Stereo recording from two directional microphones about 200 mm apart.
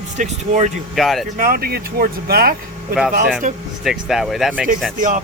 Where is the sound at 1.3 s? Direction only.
45° right (ahead or behind).